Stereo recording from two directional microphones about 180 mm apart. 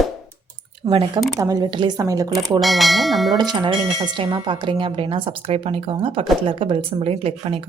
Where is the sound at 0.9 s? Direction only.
25° right (ahead or behind).